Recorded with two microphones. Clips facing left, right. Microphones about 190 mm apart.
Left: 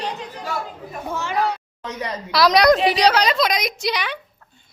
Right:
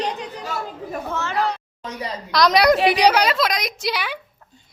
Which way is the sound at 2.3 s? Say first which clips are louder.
Left 1 dB; 5° left (ahead or behind).